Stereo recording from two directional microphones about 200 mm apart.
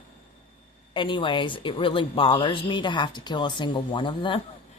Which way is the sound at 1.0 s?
25° left (ahead or behind).